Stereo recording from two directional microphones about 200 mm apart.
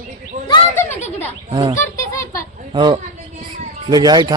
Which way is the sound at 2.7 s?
25° right (ahead or behind).